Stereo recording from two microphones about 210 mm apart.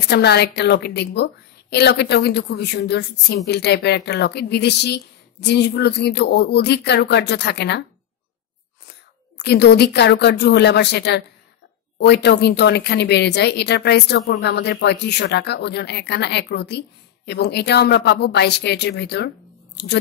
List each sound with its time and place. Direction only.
0.1 s a woman's voice: 50° left (ahead or behind)
9.4 s a woman's voice: 50° left (ahead or behind)